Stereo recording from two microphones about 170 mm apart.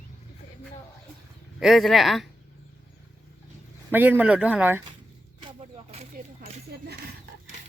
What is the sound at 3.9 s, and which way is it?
Speech, 10° right (ahead or behind).